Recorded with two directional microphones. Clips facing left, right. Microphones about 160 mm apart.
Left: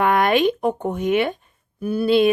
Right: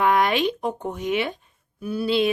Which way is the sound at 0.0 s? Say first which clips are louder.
Left 3 dB; 55° left (ahead or behind).